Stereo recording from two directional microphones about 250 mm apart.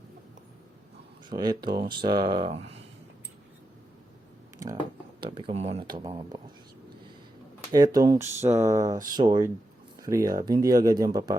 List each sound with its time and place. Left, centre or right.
1.3 s speech: centre
4.5 s a sound: centre
5.2 s speech: centre
7.7 s speech: centre